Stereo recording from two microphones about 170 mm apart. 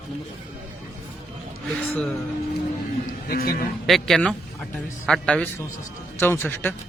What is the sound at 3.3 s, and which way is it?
Speech, 60° left (ahead or behind).